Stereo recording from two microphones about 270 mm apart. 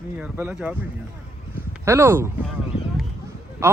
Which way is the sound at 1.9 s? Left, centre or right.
Centre.